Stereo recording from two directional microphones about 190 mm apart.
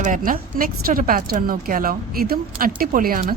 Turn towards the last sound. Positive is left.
turn(degrees=-50)  # may be behind; listen again after turning